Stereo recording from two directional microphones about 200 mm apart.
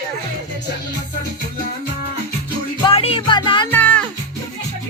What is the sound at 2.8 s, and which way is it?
Music, 30° left (ahead or behind).